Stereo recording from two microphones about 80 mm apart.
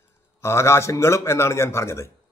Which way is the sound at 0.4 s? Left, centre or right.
Left.